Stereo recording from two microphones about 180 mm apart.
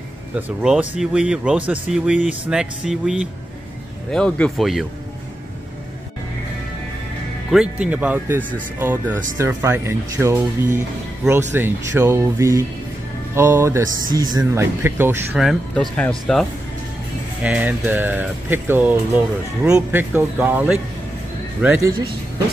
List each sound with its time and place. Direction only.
0.6 s speech: 5° right (ahead or behind)
7.5 s speech: 5° right (ahead or behind)
15.3 s speech: centre (ahead or behind); by 22.1 s 20° right (ahead or behind)